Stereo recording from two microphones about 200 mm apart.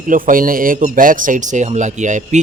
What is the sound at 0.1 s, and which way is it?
Speech, 45° right (ahead or behind).